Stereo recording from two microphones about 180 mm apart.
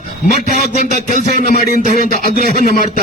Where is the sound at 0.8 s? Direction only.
45° left (ahead or behind).